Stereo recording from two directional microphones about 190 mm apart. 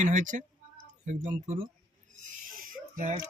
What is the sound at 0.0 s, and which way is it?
Speech, 45° right (ahead or behind).